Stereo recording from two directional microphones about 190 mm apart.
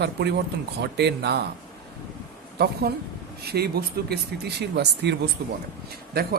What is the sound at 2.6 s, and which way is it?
A man's voice, 60° right (ahead or behind).